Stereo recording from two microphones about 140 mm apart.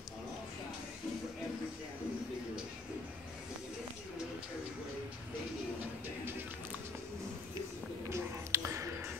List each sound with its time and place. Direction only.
8.1 s whispering: 20° right (ahead or behind)